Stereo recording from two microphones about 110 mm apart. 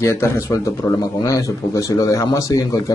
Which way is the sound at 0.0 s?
25° left (ahead or behind).